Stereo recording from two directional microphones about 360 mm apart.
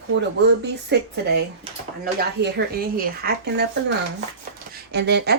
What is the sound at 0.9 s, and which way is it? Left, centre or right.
Speech, right.